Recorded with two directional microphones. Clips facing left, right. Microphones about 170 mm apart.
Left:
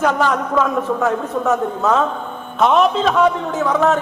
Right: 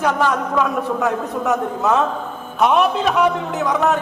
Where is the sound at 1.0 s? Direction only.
15° right (ahead or behind).